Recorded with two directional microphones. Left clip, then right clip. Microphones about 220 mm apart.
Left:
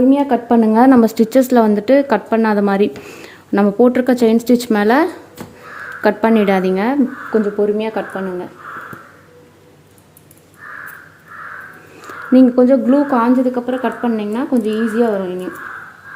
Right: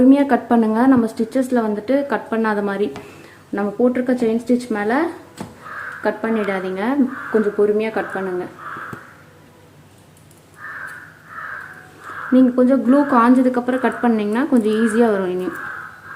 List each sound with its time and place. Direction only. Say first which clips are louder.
0.1 s a woman's voice: even; 5° left (ahead or behind)
0.4 s a woman's voice: left 5 dB; 25° left (ahead or behind)
3.2 s speech: left 9 dB; 45° left (ahead or behind)
7.6 s speech: even; 10° left (ahead or behind)
12.3 s speech: left 4 dB; 30° left (ahead or behind)
13.1 s a woman's voice: even; 5° left (ahead or behind)